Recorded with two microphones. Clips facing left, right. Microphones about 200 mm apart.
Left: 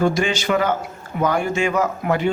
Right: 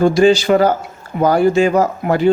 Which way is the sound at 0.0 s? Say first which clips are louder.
Right 8 dB; 35° right (ahead or behind).